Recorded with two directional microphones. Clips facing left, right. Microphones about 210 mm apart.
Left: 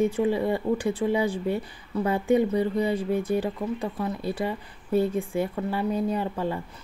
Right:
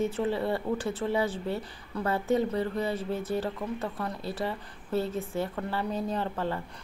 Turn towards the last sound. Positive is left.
turn(degrees=10)  # may be behind; listen again after turning